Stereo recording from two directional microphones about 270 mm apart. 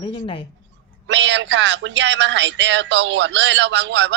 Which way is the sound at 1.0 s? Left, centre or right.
Right.